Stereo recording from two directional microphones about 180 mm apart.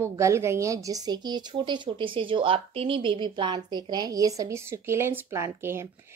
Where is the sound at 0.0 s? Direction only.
15° right (ahead or behind).